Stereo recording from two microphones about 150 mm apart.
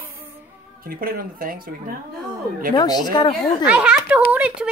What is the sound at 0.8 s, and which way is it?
Speech, 75° right (ahead or behind).